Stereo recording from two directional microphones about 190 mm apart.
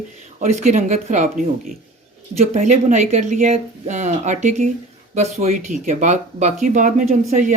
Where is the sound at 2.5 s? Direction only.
40° right (ahead or behind).